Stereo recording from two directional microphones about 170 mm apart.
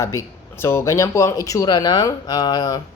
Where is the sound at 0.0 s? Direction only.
15° left (ahead or behind).